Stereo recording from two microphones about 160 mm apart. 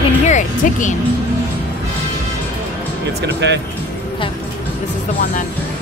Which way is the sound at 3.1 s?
90° right.